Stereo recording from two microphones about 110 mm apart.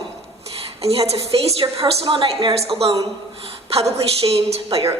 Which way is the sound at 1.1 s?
65° right (ahead or behind).